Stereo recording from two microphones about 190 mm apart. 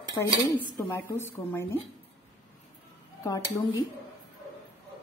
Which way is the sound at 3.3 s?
20° left (ahead or behind).